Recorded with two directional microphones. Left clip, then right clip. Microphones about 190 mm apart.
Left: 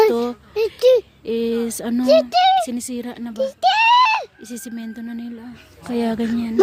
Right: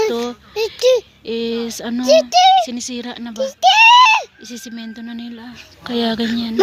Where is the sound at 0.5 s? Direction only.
40° left (ahead or behind).